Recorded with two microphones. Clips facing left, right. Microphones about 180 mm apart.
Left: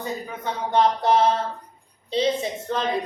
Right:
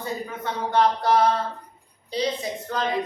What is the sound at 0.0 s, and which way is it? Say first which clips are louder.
Speech: even; 15° left (ahead or behind).